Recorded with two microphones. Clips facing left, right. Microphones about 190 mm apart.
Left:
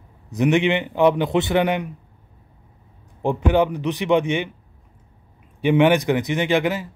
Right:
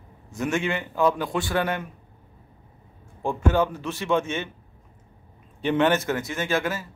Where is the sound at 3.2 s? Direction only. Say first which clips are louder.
Left 4 dB; 15° left (ahead or behind).